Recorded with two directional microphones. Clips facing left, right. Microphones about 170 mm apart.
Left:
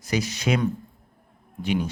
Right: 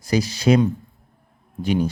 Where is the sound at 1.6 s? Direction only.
40° right (ahead or behind).